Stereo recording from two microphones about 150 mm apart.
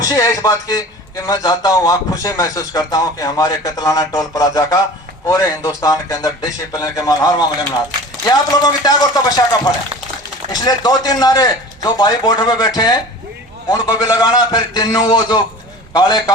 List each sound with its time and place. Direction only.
0.0 s a man's voice: 25° left (ahead or behind)